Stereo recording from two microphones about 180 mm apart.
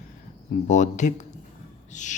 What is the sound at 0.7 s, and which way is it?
Speech, 40° left (ahead or behind).